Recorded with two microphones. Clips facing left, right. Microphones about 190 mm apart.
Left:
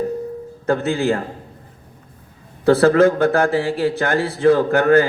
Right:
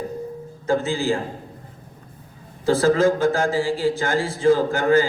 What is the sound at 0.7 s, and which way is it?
Speech, 65° left (ahead or behind).